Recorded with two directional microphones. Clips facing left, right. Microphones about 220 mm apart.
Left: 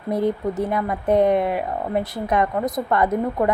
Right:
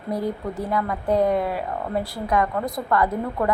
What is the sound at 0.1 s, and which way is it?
Speech, 20° left (ahead or behind).